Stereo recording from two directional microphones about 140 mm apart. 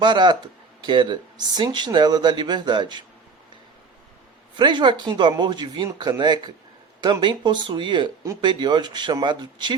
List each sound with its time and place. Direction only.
0.0 s speech: 30° right (ahead or behind)
4.5 s speech: 35° right (ahead or behind)